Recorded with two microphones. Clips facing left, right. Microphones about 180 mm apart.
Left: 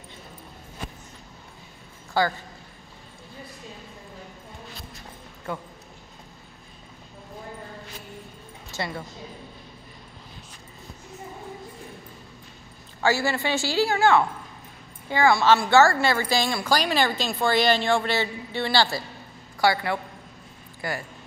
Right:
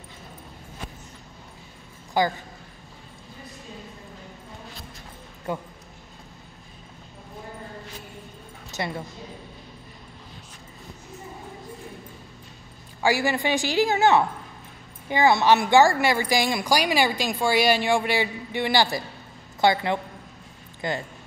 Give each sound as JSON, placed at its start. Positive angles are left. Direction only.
{"t": 2.1, "sound": "a woman's voice", "side_deg": -15}
{"t": 5.5, "sound": "a woman's voice", "side_deg": -15}
{"t": 8.7, "sound": "speech", "side_deg": -20}
{"t": 13.0, "sound": "a woman's voice", "side_deg": -15}